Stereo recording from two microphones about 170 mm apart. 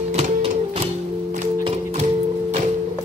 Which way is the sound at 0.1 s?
40° right (ahead or behind).